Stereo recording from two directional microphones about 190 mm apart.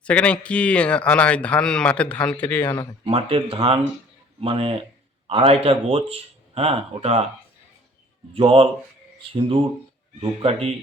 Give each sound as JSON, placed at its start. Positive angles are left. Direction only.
{"t": 0.0, "sound": "speech", "side_deg": 5}
{"t": 3.0, "sound": "speech", "side_deg": -30}
{"t": 8.3, "sound": "speech", "side_deg": -30}
{"t": 10.2, "sound": "speech", "side_deg": -30}